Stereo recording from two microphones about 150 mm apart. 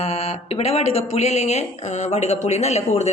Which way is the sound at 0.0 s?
40° left (ahead or behind).